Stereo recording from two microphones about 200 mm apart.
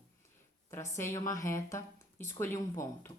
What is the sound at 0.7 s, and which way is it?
Speech, 15° left (ahead or behind).